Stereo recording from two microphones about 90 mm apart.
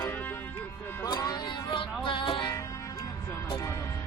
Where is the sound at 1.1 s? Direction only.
50° left (ahead or behind).